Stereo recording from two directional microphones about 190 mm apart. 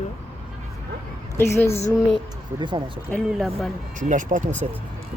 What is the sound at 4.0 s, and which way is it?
Speech, 40° right (ahead or behind).